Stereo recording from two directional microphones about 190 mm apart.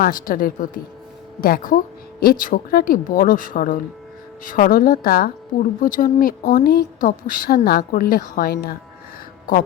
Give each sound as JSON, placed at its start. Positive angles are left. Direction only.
{"t": 0.0, "sound": "a woman's voice", "side_deg": 45}